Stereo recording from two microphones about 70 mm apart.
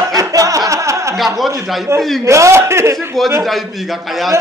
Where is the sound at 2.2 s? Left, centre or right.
Right.